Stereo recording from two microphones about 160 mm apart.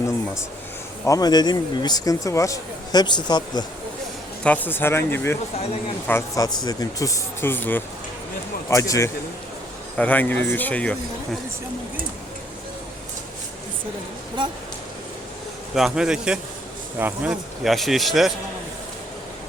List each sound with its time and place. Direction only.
1.0 s speech: 20° left (ahead or behind)
4.4 s speech: 10° left (ahead or behind)
15.7 s speech: 5° right (ahead or behind)